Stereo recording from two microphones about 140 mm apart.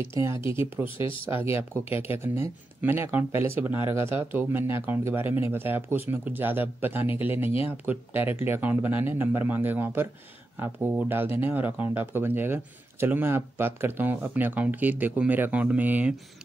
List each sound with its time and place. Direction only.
0.1 s speech: 20° right (ahead or behind)
0.8 s speech: 40° left (ahead or behind)
1.4 s speech: 15° right (ahead or behind)